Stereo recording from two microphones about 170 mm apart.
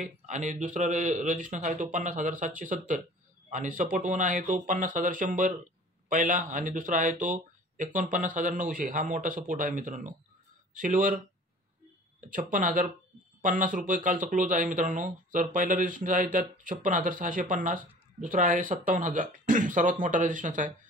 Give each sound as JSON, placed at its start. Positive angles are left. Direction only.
{"t": 0.0, "sound": "speech", "side_deg": -45}
{"t": 12.3, "sound": "speech", "side_deg": -50}